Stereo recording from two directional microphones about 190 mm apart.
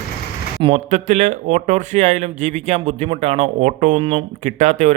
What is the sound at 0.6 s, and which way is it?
Speech, 35° right (ahead or behind).